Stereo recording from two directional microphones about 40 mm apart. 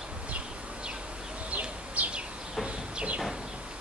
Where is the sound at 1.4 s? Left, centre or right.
Right.